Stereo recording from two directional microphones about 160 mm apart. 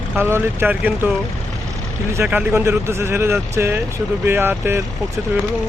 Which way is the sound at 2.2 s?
10° right (ahead or behind).